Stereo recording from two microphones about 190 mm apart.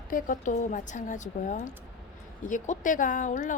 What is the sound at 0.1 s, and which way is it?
Speech, 45° left (ahead or behind).